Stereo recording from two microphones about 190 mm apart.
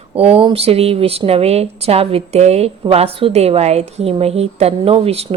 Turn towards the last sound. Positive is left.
turn(degrees=-30)  # may be behind; listen again after turning